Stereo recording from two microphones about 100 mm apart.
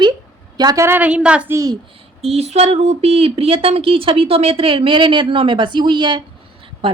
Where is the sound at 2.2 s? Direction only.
90° right; by 6.2 s 50° right (ahead or behind).